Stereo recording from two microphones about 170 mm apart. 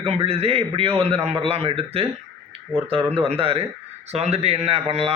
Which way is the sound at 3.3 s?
35° right (ahead or behind).